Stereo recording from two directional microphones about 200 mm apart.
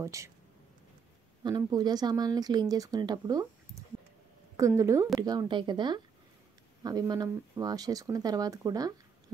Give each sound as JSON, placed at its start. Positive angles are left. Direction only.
{"t": 0.0, "sound": "speech", "side_deg": -15}
{"t": 1.4, "sound": "speech", "side_deg": -20}